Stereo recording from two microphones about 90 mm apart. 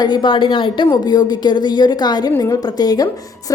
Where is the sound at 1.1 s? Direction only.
50° left (ahead or behind).